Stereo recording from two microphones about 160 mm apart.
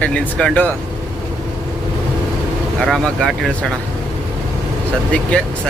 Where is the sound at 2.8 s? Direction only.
Centre (ahead or behind).